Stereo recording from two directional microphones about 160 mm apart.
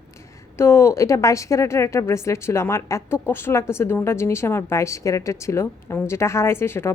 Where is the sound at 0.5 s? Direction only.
15° left (ahead or behind).